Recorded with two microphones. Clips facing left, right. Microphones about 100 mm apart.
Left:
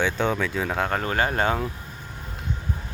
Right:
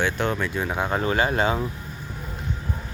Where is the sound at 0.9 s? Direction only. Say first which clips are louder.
Right 4 dB; 50° left (ahead or behind).